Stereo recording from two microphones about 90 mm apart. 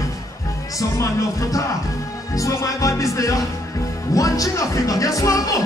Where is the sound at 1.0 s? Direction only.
35° left (ahead or behind).